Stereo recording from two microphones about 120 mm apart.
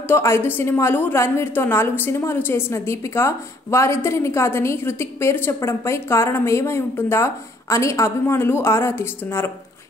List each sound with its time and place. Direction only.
0.1 s a woman's voice: 20° left (ahead or behind)